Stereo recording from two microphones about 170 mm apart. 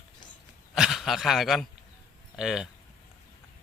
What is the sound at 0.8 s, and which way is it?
A man's voice, centre (ahead or behind).